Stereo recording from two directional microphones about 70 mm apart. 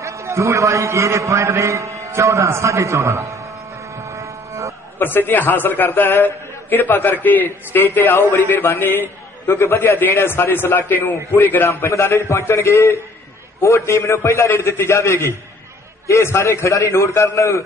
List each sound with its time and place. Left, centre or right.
0.0 s a sound: right
4.9 s a man's voice: left
8.1 s a man's voice: left
11.6 s a man's voice: left